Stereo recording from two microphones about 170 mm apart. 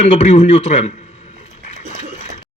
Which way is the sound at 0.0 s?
40° left (ahead or behind).